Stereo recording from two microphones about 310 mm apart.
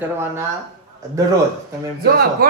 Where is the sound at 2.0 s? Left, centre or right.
Right.